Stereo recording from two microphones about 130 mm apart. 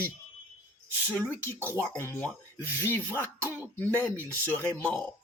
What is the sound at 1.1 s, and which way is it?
Speech, 15° left (ahead or behind).